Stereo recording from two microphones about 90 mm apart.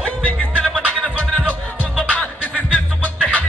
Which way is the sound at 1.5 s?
15° left (ahead or behind).